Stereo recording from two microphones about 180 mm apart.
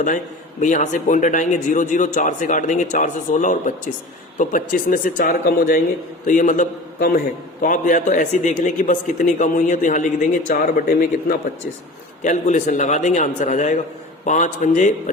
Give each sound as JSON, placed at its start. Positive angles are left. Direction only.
{"t": 0.6, "sound": "a man's voice", "side_deg": 45}
{"t": 12.2, "sound": "speech", "side_deg": 40}